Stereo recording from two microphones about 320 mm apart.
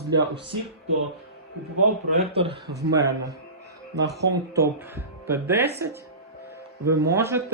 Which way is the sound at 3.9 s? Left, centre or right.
Right.